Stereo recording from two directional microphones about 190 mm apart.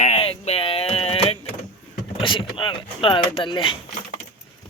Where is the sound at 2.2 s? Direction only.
25° left (ahead or behind).